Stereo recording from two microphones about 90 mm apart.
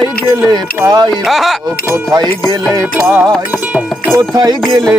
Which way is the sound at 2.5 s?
40° right (ahead or behind).